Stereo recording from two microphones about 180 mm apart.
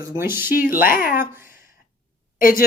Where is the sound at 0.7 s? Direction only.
50° left (ahead or behind).